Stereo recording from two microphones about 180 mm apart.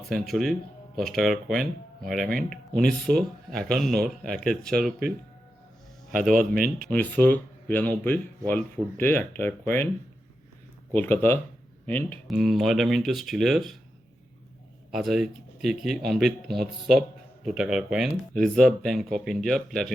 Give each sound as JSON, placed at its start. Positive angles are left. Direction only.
{"t": 0.1, "sound": "speech", "side_deg": 0}
{"t": 6.6, "sound": "speech", "side_deg": -55}
{"t": 6.9, "sound": "speech", "side_deg": 10}
{"t": 10.9, "sound": "speech", "side_deg": 10}
{"t": 12.3, "sound": "speech", "side_deg": 0}
{"t": 14.9, "sound": "speech", "side_deg": 0}